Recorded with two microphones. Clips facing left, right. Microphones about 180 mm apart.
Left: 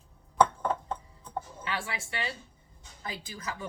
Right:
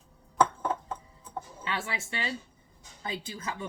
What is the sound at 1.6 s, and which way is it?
Speech, 25° right (ahead or behind).